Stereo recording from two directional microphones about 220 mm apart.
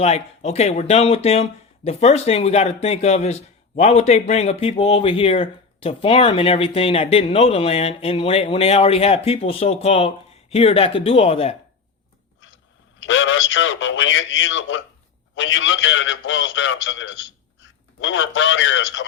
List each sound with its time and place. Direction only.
0.0 s speech: 30° left (ahead or behind)
13.0 s a man's voice: 60° left (ahead or behind)